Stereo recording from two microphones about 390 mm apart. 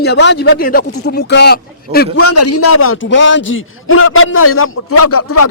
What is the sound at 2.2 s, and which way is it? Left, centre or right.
A man's voice, left.